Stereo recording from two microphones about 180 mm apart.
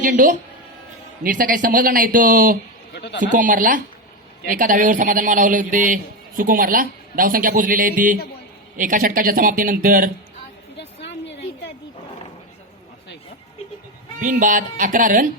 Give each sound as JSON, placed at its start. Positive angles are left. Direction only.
{"t": 0.0, "sound": "a man's voice", "side_deg": -45}
{"t": 2.9, "sound": "bleat", "side_deg": 70}
{"t": 3.2, "sound": "a man's voice", "side_deg": -45}
{"t": 14.2, "sound": "a man's voice", "side_deg": -50}